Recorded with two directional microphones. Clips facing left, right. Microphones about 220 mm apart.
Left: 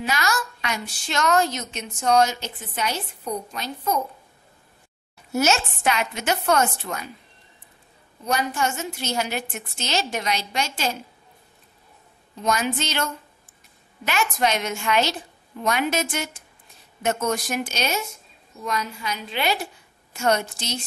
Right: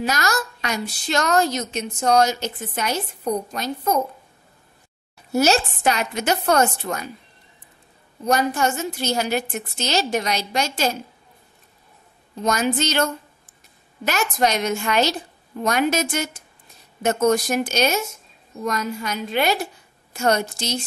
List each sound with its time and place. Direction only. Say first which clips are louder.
0.0 s a woman's voice: right 2 dB; 40° right (ahead or behind)
5.3 s a woman's voice: right 4 dB; 35° right (ahead or behind)
8.3 s a woman's voice: right 5 dB; 40° right (ahead or behind)
12.4 s a woman's voice: right 3 dB; 40° right (ahead or behind)